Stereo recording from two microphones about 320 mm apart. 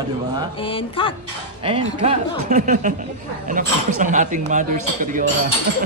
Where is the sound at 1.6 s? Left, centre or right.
Centre.